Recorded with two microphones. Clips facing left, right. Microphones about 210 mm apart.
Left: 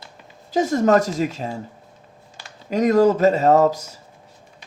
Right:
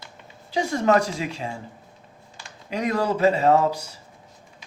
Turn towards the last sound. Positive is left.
turn(degrees=40)  # may be behind; listen again after turning